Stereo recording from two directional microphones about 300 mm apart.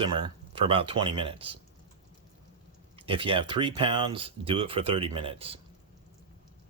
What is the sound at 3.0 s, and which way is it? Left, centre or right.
Speech, centre.